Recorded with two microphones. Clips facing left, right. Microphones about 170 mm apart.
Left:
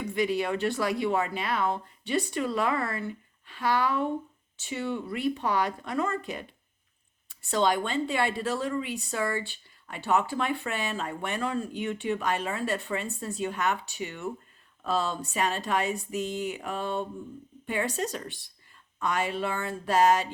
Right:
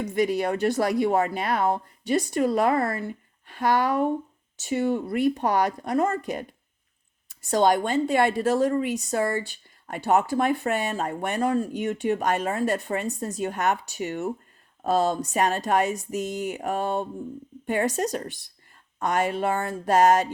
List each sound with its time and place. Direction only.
0.0 s a woman's voice: 45° right (ahead or behind)